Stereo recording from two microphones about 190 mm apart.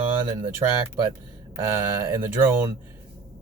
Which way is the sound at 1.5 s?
15° right (ahead or behind).